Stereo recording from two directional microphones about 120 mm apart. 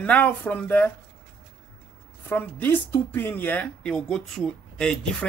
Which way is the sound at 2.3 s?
15° left (ahead or behind).